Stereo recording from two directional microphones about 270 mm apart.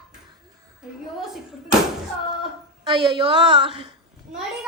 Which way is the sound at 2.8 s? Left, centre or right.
Centre.